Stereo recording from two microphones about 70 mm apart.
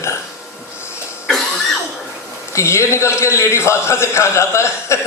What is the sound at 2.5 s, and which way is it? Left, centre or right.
A man's voice, left.